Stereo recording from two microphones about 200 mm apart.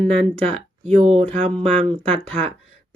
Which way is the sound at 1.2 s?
5° left (ahead or behind).